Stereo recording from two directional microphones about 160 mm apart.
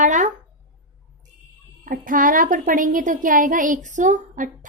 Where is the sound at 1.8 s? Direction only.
60° right (ahead or behind).